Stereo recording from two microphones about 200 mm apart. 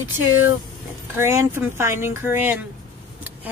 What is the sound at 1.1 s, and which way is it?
Speech, 15° right (ahead or behind).